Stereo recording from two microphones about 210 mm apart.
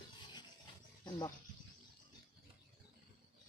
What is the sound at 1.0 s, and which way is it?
Speech, 20° left (ahead or behind).